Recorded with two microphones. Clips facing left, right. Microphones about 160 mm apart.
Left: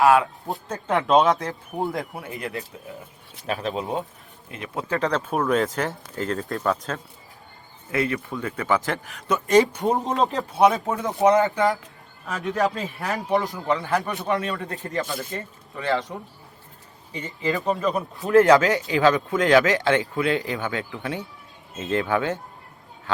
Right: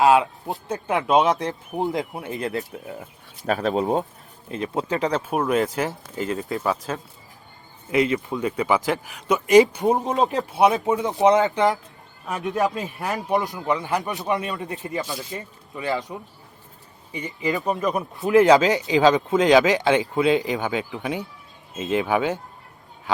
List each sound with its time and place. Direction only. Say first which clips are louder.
0.0 s speech: right 1 dB; 20° right (ahead or behind)
1.2 s a man's voice: even; 20° right (ahead or behind)
3.4 s speech: right 5 dB; 40° right (ahead or behind)
4.7 s speech: even; 20° right (ahead or behind)
7.9 s speech: right 4 dB; 20° right (ahead or behind); by 10.3 s centre (ahead or behind)
10.3 s a man's voice: left 1 dB; 15° right (ahead or behind)